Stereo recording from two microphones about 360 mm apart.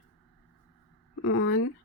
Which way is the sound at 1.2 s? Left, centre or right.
Left.